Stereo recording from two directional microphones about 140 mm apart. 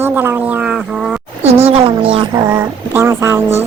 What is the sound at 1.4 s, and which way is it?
Speech, 45° right (ahead or behind).